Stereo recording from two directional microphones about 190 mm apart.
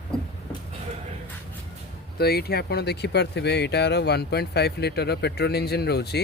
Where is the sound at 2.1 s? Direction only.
55° left (ahead or behind).